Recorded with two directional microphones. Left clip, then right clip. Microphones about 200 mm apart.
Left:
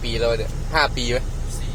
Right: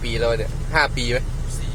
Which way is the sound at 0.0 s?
5° right (ahead or behind).